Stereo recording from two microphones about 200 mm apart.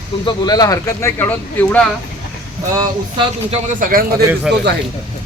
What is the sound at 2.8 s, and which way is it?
Speech, 25° right (ahead or behind).